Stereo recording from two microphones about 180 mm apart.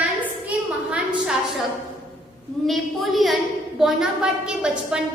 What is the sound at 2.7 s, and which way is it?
A woman's voice, centre (ahead or behind).